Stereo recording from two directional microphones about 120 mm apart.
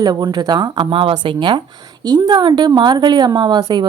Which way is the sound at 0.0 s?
35° right (ahead or behind).